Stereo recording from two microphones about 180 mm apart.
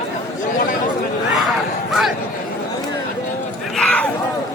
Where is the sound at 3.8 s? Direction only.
5° left (ahead or behind).